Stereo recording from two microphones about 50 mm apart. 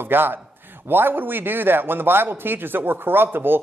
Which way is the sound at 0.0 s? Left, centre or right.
Right.